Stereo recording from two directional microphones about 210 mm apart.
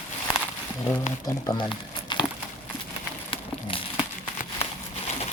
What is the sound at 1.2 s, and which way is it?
Speech, 20° left (ahead or behind).